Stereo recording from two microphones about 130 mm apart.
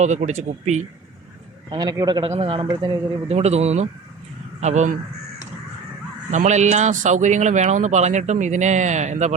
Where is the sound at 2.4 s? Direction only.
40° right (ahead or behind).